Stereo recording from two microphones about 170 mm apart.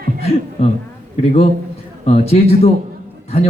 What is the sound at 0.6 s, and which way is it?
Speech, 35° left (ahead or behind).